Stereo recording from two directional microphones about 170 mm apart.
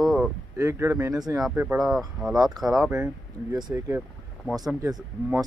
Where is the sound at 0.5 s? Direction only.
15° right (ahead or behind).